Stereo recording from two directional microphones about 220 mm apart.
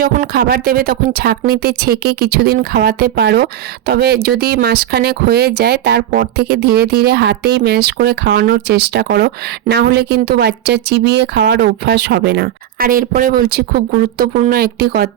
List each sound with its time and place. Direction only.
0.0 s speech: 40° right (ahead or behind)